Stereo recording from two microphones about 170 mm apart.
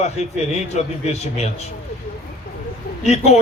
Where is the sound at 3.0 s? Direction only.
40° left (ahead or behind).